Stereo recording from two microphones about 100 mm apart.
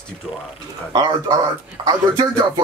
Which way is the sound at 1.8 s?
30° right (ahead or behind).